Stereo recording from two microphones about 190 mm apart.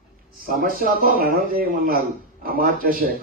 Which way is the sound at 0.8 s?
50° right (ahead or behind).